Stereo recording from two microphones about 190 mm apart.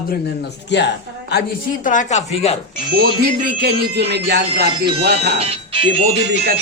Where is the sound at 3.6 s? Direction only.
60° right (ahead or behind).